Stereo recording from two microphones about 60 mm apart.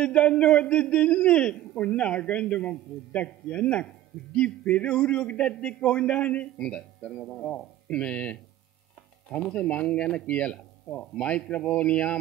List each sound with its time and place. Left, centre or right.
0.0 s speech: left